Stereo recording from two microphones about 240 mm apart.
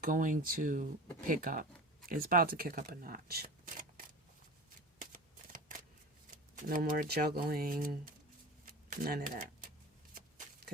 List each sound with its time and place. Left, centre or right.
0.0 s speech: right
6.3 s speech: right
8.6 s typewriter: right